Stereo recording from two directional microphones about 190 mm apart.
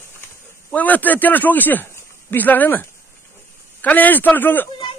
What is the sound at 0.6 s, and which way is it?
Speech, 10° left (ahead or behind).